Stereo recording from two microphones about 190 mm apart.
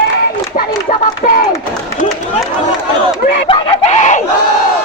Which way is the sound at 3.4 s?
40° left (ahead or behind).